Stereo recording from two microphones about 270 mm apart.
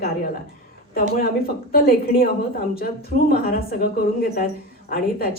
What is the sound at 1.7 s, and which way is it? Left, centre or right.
A woman's voice, left.